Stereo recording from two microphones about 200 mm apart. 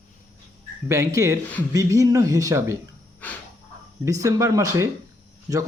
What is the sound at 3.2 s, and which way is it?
Dog, 10° left (ahead or behind).